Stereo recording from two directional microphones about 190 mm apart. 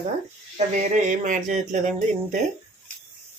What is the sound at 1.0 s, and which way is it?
Speech, 40° right (ahead or behind).